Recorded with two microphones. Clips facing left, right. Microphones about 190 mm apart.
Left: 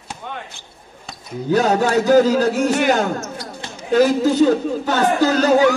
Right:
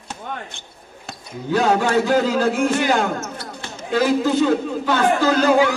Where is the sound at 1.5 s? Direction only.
40° left (ahead or behind).